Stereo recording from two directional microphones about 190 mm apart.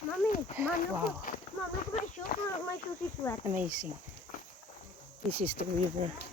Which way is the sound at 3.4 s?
10° right (ahead or behind).